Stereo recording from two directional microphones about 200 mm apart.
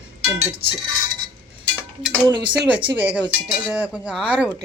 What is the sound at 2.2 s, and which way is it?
Speech, 20° right (ahead or behind).